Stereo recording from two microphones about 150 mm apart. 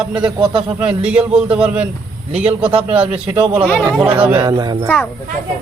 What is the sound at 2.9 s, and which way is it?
A man's voice, 10° right (ahead or behind).